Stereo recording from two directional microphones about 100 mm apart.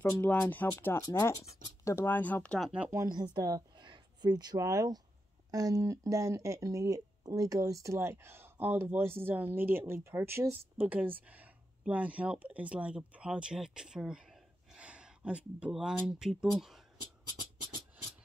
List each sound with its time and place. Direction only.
0.1 s speech: 20° left (ahead or behind)
1.0 s speech: 35° left (ahead or behind)
2.0 s speech: 20° left (ahead or behind)
2.6 s speech: 10° right (ahead or behind)
3.1 s speech: 45° right (ahead or behind); by 16.8 s 5° right (ahead or behind)